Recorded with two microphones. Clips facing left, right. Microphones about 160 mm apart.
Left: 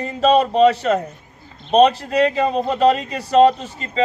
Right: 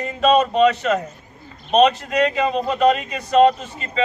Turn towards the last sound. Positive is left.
turn(degrees=35)  # may be behind; listen again after turning